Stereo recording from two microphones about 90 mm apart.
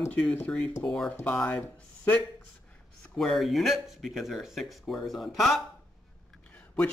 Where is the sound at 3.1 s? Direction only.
Centre (ahead or behind).